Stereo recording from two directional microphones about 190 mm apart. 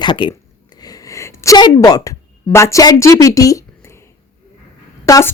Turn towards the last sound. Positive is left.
turn(degrees=15)  # may be behind; listen again after turning